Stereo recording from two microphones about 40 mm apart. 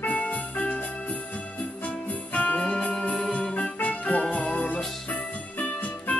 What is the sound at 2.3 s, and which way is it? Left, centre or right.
Music, left.